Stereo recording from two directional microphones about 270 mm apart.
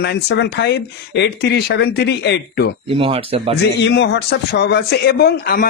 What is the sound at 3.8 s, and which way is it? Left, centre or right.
Speech, left.